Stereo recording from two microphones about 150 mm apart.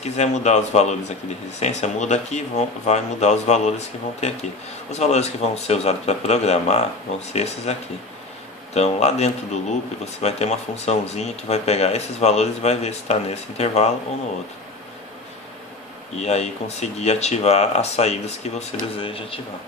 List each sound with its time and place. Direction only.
0.0 s speech: 45° left (ahead or behind)
8.7 s speech: 45° left (ahead or behind)
16.2 s speech: 45° left (ahead or behind)